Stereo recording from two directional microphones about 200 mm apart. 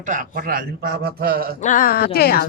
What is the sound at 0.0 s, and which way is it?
A man's voice, 40° right (ahead or behind).